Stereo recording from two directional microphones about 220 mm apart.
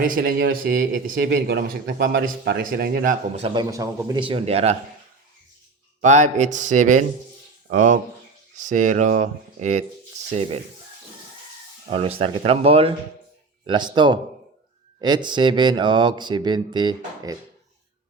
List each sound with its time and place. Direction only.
0.0 s speech: 40° right (ahead or behind)
3.4 s speech: 20° right (ahead or behind)
6.0 s speech: 35° right (ahead or behind)
11.9 s speech: 25° right (ahead or behind)